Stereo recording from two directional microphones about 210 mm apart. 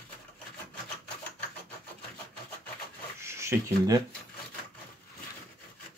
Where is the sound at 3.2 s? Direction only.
15° right (ahead or behind).